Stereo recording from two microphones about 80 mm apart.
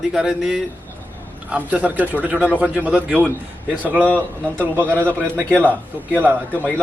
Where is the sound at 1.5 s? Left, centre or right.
Centre.